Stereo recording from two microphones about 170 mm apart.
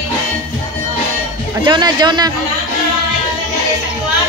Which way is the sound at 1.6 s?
25° right (ahead or behind).